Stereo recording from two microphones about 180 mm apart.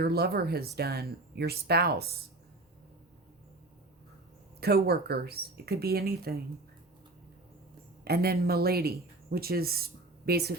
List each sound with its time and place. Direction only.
0.0 s speech: 60° right (ahead or behind)
4.6 s speech: 60° right (ahead or behind)
8.0 s speech: 60° right (ahead or behind)